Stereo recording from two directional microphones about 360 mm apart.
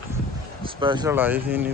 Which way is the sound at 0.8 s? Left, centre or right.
Centre.